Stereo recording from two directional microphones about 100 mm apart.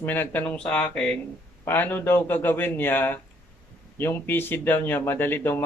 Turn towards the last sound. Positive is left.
turn(degrees=20)  # may be behind; listen again after turning